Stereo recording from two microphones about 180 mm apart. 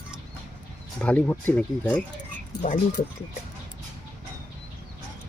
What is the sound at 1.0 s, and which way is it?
Speech, 10° left (ahead or behind).